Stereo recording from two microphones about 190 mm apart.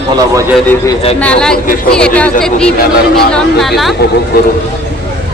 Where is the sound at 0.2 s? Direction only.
15° right (ahead or behind).